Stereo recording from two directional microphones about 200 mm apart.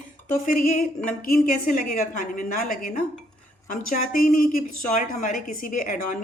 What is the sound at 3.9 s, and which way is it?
A woman's voice, 40° left (ahead or behind).